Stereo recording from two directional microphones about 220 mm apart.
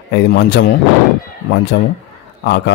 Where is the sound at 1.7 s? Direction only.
50° left (ahead or behind).